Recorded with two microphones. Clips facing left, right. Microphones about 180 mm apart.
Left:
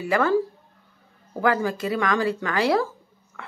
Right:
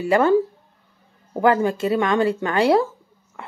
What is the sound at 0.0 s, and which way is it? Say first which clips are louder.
Speech: right 5 dB; 25° right (ahead or behind).